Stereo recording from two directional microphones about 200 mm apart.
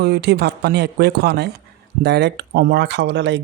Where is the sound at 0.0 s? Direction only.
55° right (ahead or behind).